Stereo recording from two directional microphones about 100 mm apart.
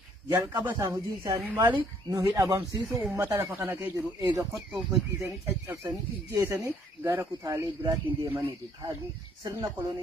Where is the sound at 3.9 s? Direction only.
35° right (ahead or behind).